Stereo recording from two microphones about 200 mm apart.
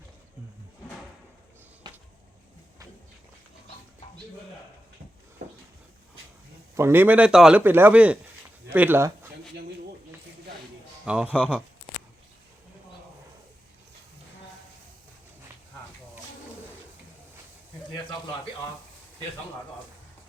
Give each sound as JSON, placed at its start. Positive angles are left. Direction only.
{"t": 1.8, "sound": "a sound", "side_deg": -20}
{"t": 6.7, "sound": "a man's voice", "side_deg": -10}
{"t": 11.0, "sound": "speech", "side_deg": -5}